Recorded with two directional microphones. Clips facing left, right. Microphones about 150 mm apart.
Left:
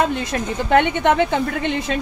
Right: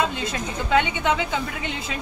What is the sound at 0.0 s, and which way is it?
A woman's voice, 55° left (ahead or behind).